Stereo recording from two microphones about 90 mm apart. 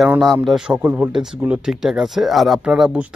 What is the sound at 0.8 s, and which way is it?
Speech, 15° right (ahead or behind).